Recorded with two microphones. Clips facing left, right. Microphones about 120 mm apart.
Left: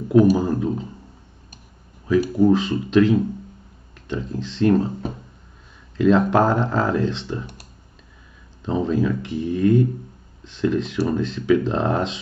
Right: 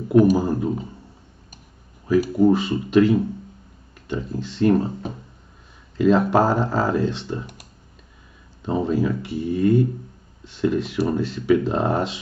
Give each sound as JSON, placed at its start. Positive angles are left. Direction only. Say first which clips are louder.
{"t": 0.3, "sound": "speech", "louder": "even", "side_deg": -10}
{"t": 2.0, "sound": "speech", "louder": "even", "side_deg": -5}
{"t": 5.9, "sound": "speech", "louder": "left 1 dB", "side_deg": -5}
{"t": 8.6, "sound": "speech", "louder": "even", "side_deg": -10}